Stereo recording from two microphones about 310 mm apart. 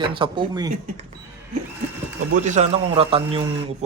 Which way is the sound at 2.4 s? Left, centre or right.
Right.